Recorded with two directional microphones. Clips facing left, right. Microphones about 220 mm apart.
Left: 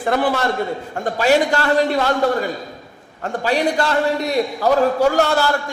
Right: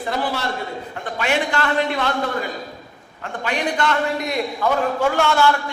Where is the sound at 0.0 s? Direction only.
50° left (ahead or behind).